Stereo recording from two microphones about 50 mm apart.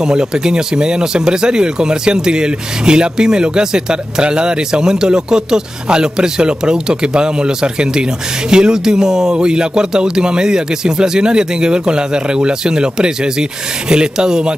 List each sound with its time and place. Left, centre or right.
0.0 s speech: centre